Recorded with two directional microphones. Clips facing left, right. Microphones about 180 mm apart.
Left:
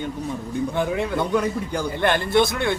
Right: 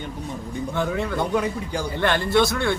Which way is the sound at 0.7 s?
15° left (ahead or behind).